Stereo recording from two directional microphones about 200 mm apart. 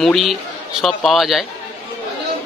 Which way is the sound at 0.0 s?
Centre (ahead or behind).